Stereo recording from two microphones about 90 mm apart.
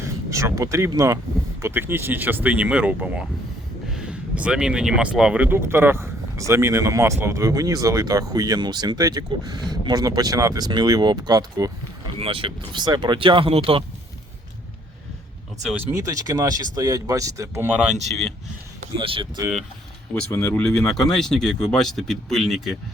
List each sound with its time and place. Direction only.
0.0 s speech: 35° right (ahead or behind)
1.6 s speech: 25° right (ahead or behind); by 10.7 s 40° right (ahead or behind)
10.7 s speech: 50° right (ahead or behind)
12.2 s speech: 85° right
12.8 s speech: 55° right (ahead or behind); by 13.8 s 90° right
16.0 s speech: 35° right (ahead or behind)
17.7 s speech: 10° right (ahead or behind)
18.9 s speech: 70° right (ahead or behind)
20.3 s speech: 25° left (ahead or behind)
20.6 s speech: 5° left (ahead or behind)